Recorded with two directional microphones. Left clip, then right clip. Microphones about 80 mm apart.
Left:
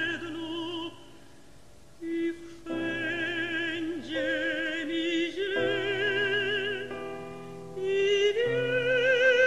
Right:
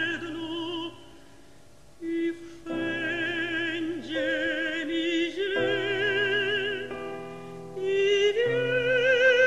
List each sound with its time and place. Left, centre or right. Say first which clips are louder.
0.0 s music: right 2 dB; right
2.1 s music: right 2 dB; right